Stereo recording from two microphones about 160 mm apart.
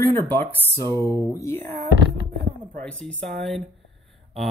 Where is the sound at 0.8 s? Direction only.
25° right (ahead or behind).